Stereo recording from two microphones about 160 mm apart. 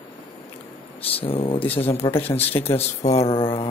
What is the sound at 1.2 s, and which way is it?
Speech, 35° left (ahead or behind).